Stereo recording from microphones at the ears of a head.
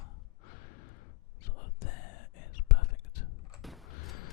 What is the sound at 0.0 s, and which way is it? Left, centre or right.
Sigh, left.